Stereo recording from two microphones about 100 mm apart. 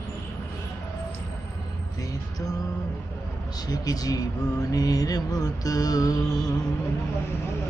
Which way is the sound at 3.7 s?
40° left (ahead or behind).